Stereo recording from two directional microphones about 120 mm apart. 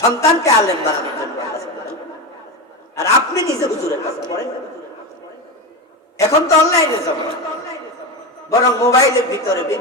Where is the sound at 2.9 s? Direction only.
25° left (ahead or behind).